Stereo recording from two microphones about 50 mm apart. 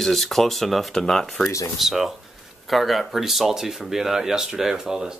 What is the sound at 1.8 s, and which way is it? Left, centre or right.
Speech, centre.